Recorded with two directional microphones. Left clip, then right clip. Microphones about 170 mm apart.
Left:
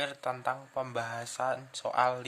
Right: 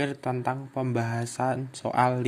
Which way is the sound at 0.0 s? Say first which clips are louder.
Right 4 dB; 10° right (ahead or behind).